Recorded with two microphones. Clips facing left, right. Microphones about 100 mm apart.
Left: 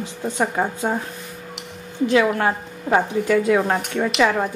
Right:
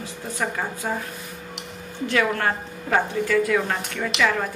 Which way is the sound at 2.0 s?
15° left (ahead or behind).